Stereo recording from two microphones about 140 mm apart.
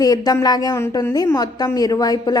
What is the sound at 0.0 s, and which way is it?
A woman's voice, 25° left (ahead or behind).